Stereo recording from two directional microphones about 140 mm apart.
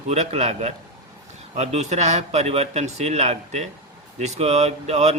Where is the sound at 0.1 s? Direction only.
50° right (ahead or behind).